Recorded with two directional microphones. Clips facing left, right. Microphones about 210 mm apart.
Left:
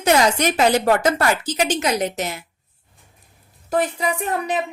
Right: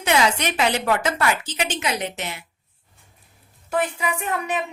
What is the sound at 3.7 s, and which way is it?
Speech, 40° left (ahead or behind).